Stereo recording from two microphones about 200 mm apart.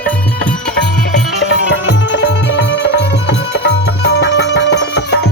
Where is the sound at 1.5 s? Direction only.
65° left (ahead or behind).